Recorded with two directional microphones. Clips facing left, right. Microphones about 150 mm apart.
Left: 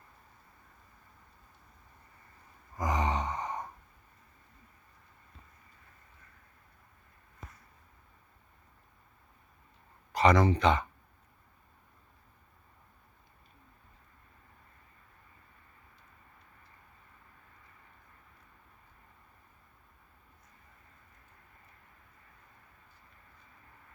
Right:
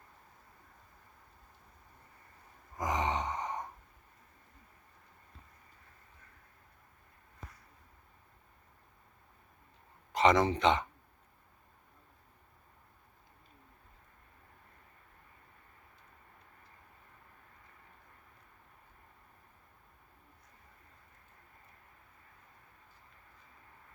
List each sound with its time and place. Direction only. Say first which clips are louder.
2.7 s gasp: left 2 dB; 20° right (ahead or behind)
10.1 s speech: left 2 dB; 20° right (ahead or behind)